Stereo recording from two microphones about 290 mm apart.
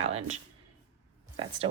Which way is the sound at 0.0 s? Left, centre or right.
Right.